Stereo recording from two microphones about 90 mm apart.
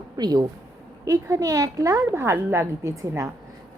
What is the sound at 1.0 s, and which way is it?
A woman's voice, 40° right (ahead or behind).